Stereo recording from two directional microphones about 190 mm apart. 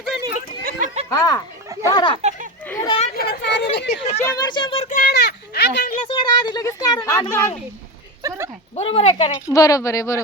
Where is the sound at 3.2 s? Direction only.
60° left (ahead or behind).